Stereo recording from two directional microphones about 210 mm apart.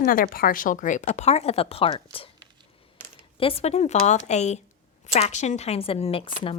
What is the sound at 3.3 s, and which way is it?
A woman's voice, 30° left (ahead or behind).